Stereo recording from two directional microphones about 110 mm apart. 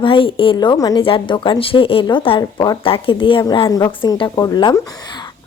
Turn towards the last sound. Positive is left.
turn(degrees=40)  # may be behind; listen again after turning